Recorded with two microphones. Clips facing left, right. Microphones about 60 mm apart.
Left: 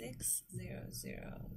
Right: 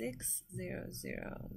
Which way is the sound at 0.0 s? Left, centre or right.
Right.